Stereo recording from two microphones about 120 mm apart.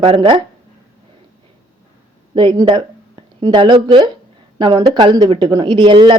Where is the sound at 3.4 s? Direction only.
40° right (ahead or behind).